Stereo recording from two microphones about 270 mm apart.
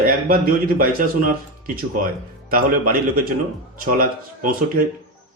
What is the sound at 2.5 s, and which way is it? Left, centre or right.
A man's voice, right.